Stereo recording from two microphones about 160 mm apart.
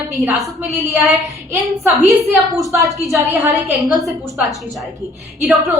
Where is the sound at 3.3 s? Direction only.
10° right (ahead or behind).